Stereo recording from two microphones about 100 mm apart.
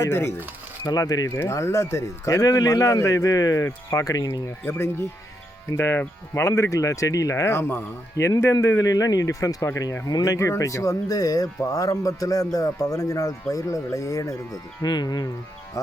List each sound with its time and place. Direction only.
0.0 s speech: 25° left (ahead or behind)
0.9 s speech: 40° left (ahead or behind)
1.4 s speech: 25° left (ahead or behind)
4.4 s speech: 25° left (ahead or behind)
14.8 s speech: 45° left (ahead or behind)